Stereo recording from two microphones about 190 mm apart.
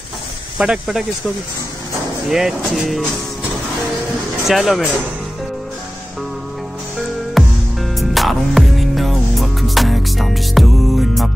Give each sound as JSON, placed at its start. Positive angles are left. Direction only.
{"t": 0.6, "sound": "speech", "side_deg": -5}
{"t": 2.2, "sound": "speech", "side_deg": 0}
{"t": 4.5, "sound": "speech", "side_deg": 0}
{"t": 7.3, "sound": "music", "side_deg": 0}